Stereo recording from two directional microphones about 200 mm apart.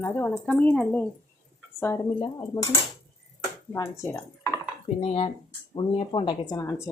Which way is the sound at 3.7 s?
10° left (ahead or behind).